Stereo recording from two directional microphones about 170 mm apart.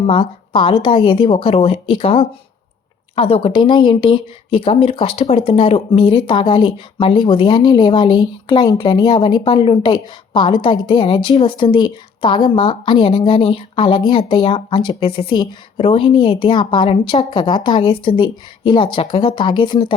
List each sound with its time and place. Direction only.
0.0 s a woman's voice: 30° left (ahead or behind)